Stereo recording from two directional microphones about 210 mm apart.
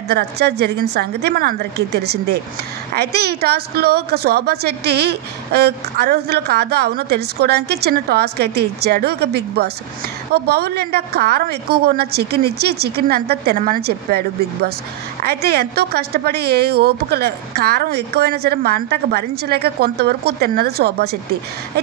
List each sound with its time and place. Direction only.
0.1 s a woman's voice: 50° right (ahead or behind)